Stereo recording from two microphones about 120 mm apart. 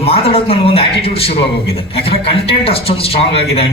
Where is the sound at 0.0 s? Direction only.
55° left (ahead or behind).